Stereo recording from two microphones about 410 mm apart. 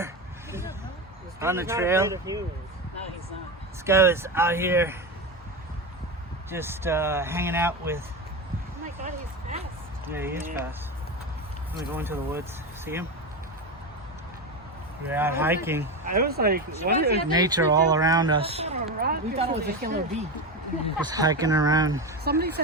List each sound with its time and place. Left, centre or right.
1.4 s speech: centre
3.8 s speech: centre
6.5 s speech: centre
9.0 s a sound: centre
10.1 s speech: centre
11.9 s speech: centre
15.0 s speech: centre
16.0 s speech: right
17.3 s speech: centre
22.2 s speech: right